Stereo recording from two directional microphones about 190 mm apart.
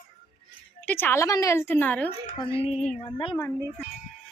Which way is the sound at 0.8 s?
10° left (ahead or behind).